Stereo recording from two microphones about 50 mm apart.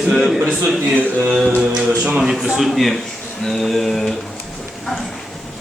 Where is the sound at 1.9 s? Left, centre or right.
Right.